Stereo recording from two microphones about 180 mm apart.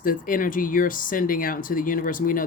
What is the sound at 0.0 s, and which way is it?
Speech, 50° left (ahead or behind).